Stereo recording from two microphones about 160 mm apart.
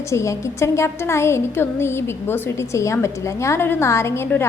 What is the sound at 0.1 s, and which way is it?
A woman's voice, 20° left (ahead or behind).